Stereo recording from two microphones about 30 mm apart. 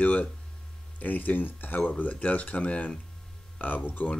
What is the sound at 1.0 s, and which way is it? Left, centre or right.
Speech, left.